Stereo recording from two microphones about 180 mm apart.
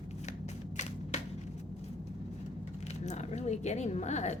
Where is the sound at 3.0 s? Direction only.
40° left (ahead or behind).